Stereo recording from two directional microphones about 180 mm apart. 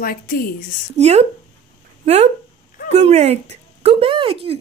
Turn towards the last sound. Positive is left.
turn(degrees=-30)  # may be behind; listen again after turning